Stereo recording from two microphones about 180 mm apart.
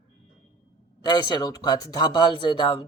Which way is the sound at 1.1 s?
25° left (ahead or behind).